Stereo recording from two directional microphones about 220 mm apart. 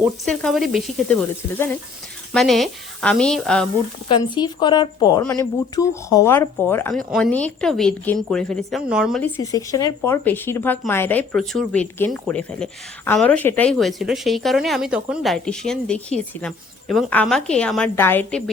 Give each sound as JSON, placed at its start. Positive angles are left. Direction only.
{"t": 0.0, "sound": "speech", "side_deg": 0}
{"t": 4.1, "sound": "a woman's voice", "side_deg": 20}
{"t": 9.2, "sound": "speech", "side_deg": 15}